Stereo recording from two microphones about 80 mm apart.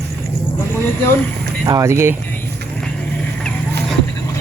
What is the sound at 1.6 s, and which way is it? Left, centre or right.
Speech, right.